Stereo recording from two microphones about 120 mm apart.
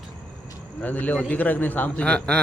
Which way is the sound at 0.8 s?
15° left (ahead or behind).